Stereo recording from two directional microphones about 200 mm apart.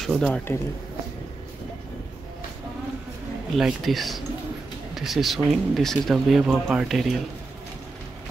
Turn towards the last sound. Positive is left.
turn(degrees=0)  # may be behind; listen again after turning